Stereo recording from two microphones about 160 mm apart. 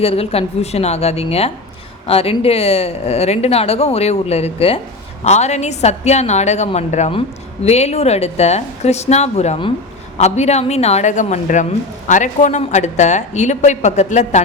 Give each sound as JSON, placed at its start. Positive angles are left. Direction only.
{"t": 0.0, "sound": "a woman's voice", "side_deg": 40}